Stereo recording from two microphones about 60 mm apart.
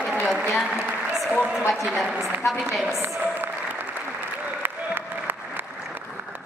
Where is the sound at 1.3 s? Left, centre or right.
Left.